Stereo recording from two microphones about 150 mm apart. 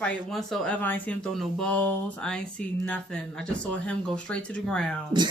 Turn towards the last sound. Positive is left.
turn(degrees=5)  # may be behind; listen again after turning